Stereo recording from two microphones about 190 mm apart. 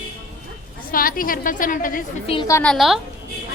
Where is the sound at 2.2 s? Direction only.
30° left (ahead or behind).